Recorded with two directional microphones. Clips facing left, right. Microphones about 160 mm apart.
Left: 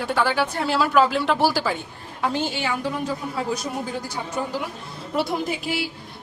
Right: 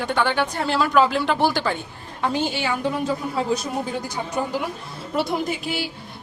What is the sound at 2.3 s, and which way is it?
Speech, 15° right (ahead or behind).